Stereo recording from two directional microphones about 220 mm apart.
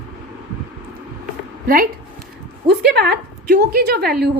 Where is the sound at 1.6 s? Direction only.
40° right (ahead or behind).